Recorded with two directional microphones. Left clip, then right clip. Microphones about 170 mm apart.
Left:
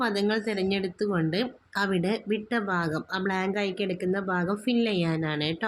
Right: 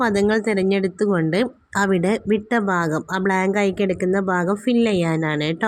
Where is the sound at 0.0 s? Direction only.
25° right (ahead or behind).